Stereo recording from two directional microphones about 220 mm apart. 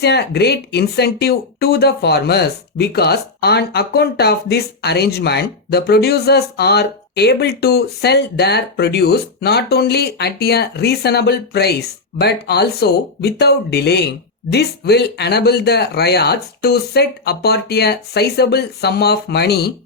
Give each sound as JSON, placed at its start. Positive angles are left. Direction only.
{"t": 0.0, "sound": "speech", "side_deg": 50}